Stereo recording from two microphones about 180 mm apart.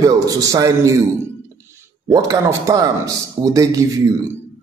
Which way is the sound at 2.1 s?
20° right (ahead or behind).